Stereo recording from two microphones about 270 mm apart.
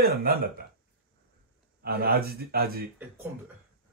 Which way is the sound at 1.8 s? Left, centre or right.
Right.